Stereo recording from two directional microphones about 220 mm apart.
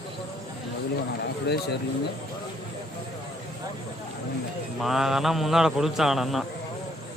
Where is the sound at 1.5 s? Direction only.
50° left (ahead or behind).